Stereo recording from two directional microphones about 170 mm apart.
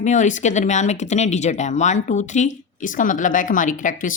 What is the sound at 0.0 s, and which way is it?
Speech, 45° left (ahead or behind).